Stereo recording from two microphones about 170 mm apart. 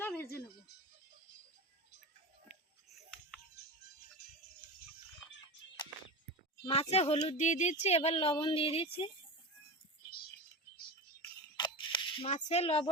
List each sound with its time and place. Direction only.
0.0 s music: 15° left (ahead or behind)
2.5 s music: centre (ahead or behind)
4.2 s music: 70° left (ahead or behind)
6.6 s speech: 35° left (ahead or behind)
10.0 s music: 65° left (ahead or behind)
11.5 s single-lens reflex camera: 25° left (ahead or behind)
12.3 s speech: 40° left (ahead or behind)